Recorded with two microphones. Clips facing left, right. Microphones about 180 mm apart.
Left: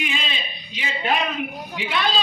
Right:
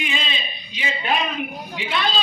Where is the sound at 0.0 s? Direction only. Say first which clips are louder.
Right 1 dB; 5° left (ahead or behind).